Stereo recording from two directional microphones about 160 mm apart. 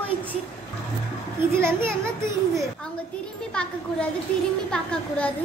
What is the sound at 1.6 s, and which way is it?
Speech, 15° right (ahead or behind).